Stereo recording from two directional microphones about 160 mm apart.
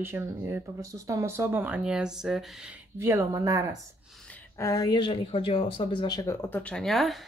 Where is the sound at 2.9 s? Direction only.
20° right (ahead or behind).